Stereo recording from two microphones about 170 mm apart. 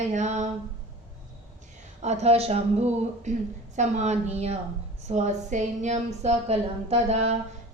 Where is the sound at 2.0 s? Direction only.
40° right (ahead or behind).